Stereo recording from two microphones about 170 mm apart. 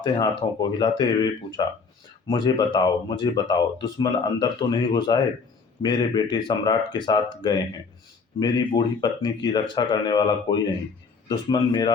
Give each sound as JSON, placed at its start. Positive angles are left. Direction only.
{"t": 0.0, "sound": "speech", "side_deg": 25}